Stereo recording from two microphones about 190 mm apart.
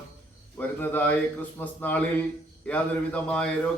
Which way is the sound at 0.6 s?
10° left (ahead or behind).